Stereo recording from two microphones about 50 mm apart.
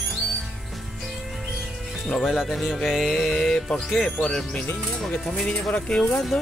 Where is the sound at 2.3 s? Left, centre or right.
Centre.